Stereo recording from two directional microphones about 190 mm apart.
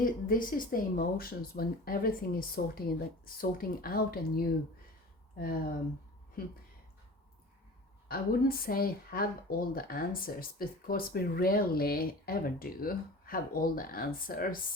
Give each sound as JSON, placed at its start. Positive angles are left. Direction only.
{"t": 0.0, "sound": "speech", "side_deg": 45}
{"t": 8.0, "sound": "speech", "side_deg": 50}